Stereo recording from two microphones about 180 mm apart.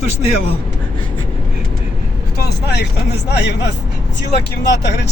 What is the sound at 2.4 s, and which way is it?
Speech, 65° left (ahead or behind).